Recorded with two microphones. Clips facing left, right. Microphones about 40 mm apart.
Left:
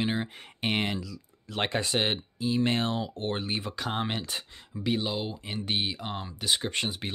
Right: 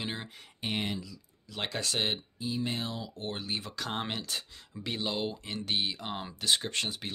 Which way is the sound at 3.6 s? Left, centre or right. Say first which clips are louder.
Left 4 dB; centre.